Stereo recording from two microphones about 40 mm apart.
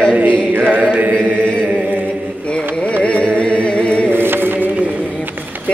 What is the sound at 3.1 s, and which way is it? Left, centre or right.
Music, left.